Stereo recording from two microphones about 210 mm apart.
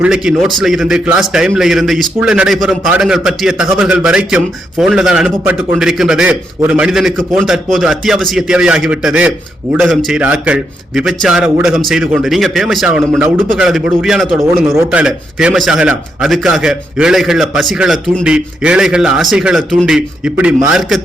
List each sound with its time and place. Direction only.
0.0 s a man's voice: 5° right (ahead or behind)